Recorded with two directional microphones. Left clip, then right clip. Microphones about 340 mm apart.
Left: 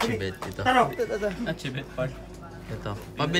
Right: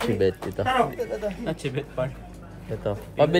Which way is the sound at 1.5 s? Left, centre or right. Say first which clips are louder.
Right 3 dB; centre.